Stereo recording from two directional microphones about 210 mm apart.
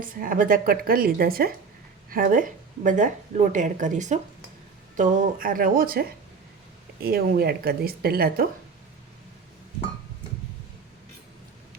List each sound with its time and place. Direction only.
0.0 s a woman's voice: 40° right (ahead or behind)